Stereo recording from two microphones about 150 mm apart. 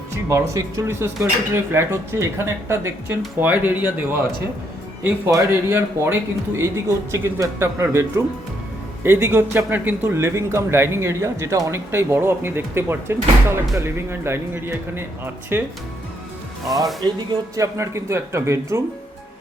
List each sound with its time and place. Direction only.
0.3 s a man's voice: 20° right (ahead or behind)
5.0 s a man's voice: 15° right (ahead or behind)
9.0 s a man's voice: 15° right (ahead or behind)
16.6 s a man's voice: 25° right (ahead or behind)